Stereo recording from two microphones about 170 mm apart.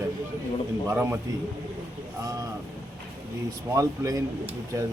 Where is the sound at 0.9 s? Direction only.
15° right (ahead or behind).